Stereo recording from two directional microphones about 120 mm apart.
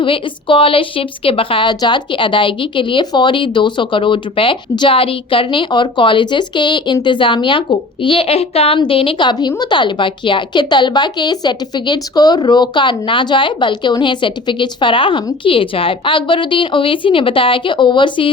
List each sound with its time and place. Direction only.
0.0 s a woman's voice: 45° left (ahead or behind)